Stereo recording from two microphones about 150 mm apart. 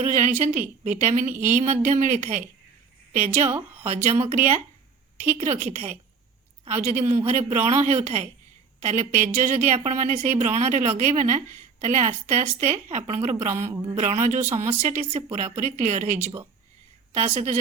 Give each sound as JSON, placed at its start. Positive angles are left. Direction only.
{"t": 0.0, "sound": "a woman's voice", "side_deg": -50}
{"t": 1.3, "sound": "speech", "side_deg": -15}
{"t": 1.5, "sound": "a woman's voice", "side_deg": -55}
{"t": 5.6, "sound": "a woman's voice", "side_deg": -50}
{"t": 13.7, "sound": "speech", "side_deg": -20}
{"t": 13.9, "sound": "a woman's voice", "side_deg": -55}